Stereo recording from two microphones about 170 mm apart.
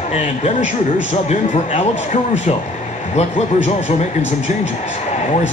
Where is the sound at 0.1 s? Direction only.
40° left (ahead or behind).